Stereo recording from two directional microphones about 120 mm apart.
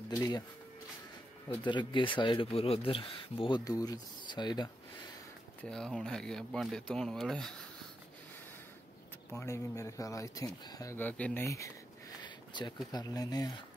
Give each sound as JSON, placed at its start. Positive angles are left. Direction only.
{"t": 0.1, "sound": "speech", "side_deg": 35}
{"t": 1.5, "sound": "speech", "side_deg": 40}
{"t": 3.6, "sound": "speech", "side_deg": 30}
{"t": 5.6, "sound": "speech", "side_deg": 5}
{"t": 9.3, "sound": "speech", "side_deg": 25}
{"t": 11.0, "sound": "speech", "side_deg": 15}
{"t": 11.4, "sound": "speech", "side_deg": 25}
{"t": 12.2, "sound": "a sound", "side_deg": 35}
{"t": 12.9, "sound": "speech", "side_deg": 35}